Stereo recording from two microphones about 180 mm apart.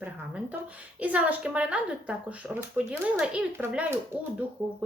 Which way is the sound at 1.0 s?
10° right (ahead or behind).